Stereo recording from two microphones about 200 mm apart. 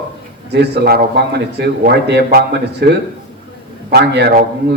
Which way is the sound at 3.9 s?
55° right (ahead or behind).